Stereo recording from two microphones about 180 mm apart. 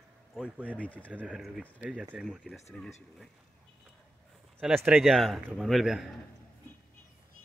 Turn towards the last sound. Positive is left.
turn(degrees=0)  # may be behind; listen again after turning